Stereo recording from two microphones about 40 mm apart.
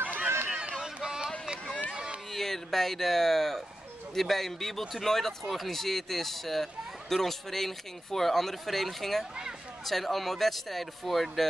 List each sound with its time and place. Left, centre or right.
0.0 s run: right
0.5 s run: right
2.3 s speech: centre